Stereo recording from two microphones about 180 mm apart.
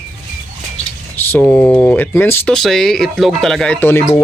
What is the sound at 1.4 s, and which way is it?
Speech, 5° left (ahead or behind).